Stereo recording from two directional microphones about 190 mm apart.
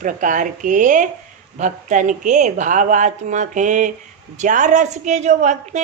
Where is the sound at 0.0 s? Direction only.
45° right (ahead or behind).